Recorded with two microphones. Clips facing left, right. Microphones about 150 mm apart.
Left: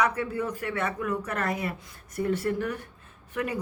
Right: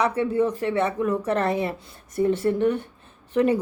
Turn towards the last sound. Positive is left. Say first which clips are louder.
# right 10 dB
turn(degrees=-30)  # may be behind; listen again after turning